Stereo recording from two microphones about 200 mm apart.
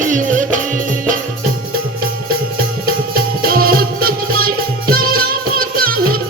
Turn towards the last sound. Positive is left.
turn(degrees=-45)  # may be behind; listen again after turning